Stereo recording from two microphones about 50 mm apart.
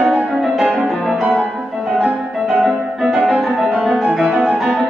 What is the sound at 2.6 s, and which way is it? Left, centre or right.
Music, centre.